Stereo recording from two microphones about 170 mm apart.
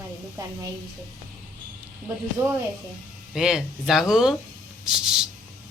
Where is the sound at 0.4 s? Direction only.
20° right (ahead or behind).